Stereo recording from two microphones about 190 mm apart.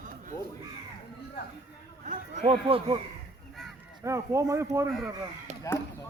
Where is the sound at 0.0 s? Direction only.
40° right (ahead or behind).